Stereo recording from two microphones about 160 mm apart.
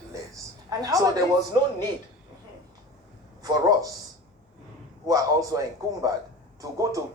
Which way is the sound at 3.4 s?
25° right (ahead or behind).